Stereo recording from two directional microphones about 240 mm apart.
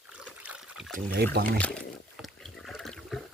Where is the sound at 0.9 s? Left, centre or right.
Right.